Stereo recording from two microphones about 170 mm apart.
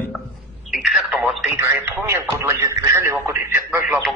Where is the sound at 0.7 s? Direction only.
Centre (ahead or behind).